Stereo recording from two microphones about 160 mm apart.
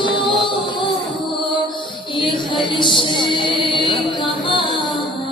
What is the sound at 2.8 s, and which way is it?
Music, 30° left (ahead or behind).